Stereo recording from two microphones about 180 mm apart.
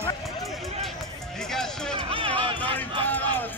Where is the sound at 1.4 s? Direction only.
5° left (ahead or behind).